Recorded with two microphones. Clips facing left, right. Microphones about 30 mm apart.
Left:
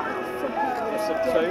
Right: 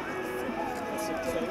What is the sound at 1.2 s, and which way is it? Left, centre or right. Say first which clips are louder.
Speech: left 12 dB; left.